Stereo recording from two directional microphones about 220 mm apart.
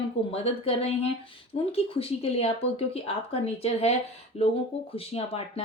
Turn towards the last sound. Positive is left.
turn(degrees=25)  # may be behind; listen again after turning